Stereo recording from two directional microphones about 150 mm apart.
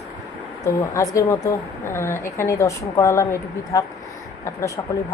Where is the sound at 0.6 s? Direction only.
20° left (ahead or behind).